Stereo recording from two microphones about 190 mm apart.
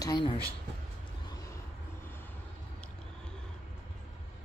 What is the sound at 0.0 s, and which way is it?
Speech, 25° left (ahead or behind).